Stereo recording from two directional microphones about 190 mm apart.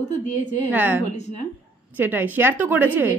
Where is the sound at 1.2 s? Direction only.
40° left (ahead or behind).